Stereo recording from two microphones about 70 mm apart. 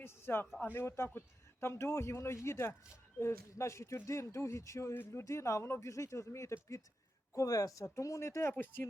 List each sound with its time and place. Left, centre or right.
0.0 s a sound: left
0.6 s speech: left
7.3 s speech: left
8.5 s speech: left